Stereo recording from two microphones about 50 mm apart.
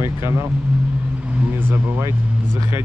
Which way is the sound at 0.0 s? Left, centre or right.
Right.